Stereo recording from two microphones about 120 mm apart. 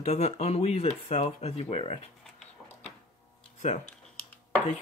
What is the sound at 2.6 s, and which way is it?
Printer, 5° right (ahead or behind).